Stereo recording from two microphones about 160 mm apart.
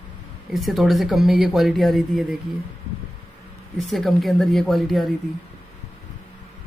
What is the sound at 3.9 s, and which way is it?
A man's voice, centre (ahead or behind).